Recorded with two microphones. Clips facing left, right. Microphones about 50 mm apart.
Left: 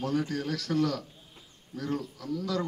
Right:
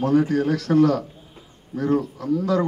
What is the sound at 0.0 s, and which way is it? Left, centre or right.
A man's voice, right.